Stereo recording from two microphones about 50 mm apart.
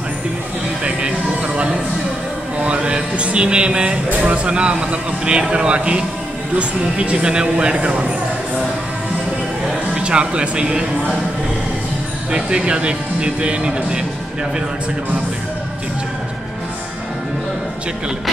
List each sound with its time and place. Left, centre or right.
2.6 s speech: right
9.9 s speech: right
12.3 s speech: centre